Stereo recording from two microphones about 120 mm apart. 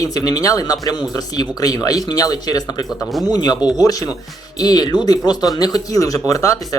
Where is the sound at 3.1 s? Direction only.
Centre (ahead or behind).